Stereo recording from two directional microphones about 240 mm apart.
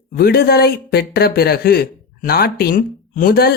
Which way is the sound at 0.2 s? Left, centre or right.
Left.